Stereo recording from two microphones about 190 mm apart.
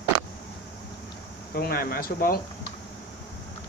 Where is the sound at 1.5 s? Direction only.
55° left (ahead or behind).